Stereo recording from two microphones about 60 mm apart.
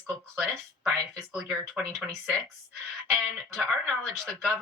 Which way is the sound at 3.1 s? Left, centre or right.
Centre.